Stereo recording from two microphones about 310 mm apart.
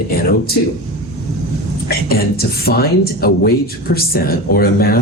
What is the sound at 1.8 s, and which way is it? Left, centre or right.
Speech, left.